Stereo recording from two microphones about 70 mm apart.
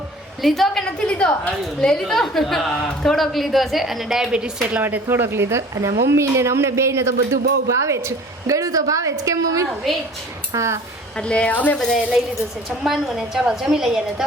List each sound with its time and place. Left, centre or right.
0.4 s a woman's voice: centre
4.8 s a woman's voice: right
11.2 s a woman's voice: centre
12.8 s a woman's voice: centre